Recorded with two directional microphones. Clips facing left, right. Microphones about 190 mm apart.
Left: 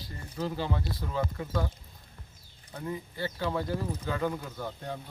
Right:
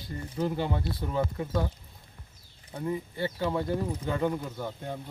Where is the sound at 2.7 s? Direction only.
25° right (ahead or behind).